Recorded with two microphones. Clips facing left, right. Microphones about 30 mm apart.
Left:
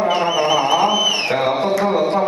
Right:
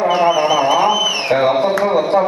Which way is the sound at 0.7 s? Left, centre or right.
Centre.